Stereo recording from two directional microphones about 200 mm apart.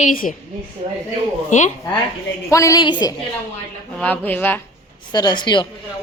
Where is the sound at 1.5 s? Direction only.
40° left (ahead or behind).